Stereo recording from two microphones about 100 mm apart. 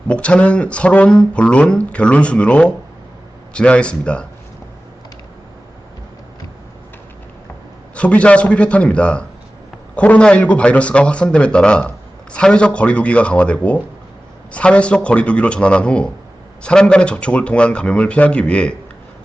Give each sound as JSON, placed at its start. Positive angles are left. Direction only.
{"t": 0.1, "sound": "speech", "side_deg": 10}
{"t": 7.9, "sound": "speech", "side_deg": 10}